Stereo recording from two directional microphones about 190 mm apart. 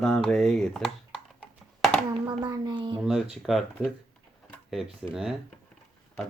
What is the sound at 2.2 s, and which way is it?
Speech, 25° right (ahead or behind).